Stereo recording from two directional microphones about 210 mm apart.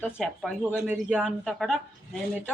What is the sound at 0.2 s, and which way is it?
A woman's voice, 5° right (ahead or behind).